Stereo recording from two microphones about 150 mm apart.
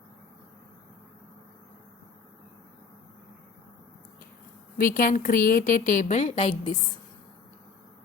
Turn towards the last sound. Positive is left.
turn(degrees=35)  # may be behind; listen again after turning